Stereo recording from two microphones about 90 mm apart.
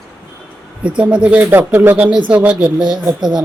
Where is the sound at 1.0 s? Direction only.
10° right (ahead or behind).